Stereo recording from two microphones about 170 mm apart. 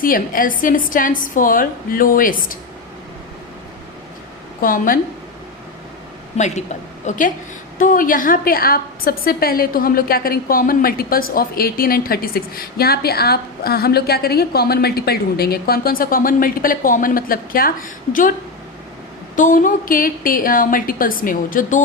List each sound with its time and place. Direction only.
0.0 s a woman's voice: 55° left (ahead or behind)
4.6 s a woman's voice: 55° left (ahead or behind)
6.3 s a woman's voice: 45° left (ahead or behind)
19.4 s a woman's voice: 50° left (ahead or behind)